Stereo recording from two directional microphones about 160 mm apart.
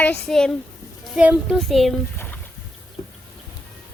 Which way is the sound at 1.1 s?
5° right (ahead or behind).